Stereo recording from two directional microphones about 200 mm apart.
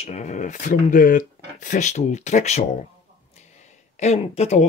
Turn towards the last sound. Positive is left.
turn(degrees=35)  # may be behind; listen again after turning